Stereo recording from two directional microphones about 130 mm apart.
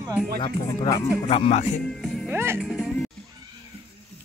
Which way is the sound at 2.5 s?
5° right (ahead or behind).